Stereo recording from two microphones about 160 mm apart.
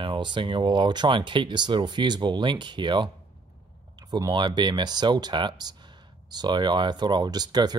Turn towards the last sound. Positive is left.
turn(degrees=-25)  # may be behind; listen again after turning